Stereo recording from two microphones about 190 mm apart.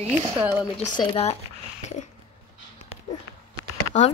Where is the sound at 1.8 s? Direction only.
35° left (ahead or behind).